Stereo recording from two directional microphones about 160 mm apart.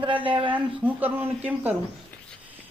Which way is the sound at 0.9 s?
10° right (ahead or behind).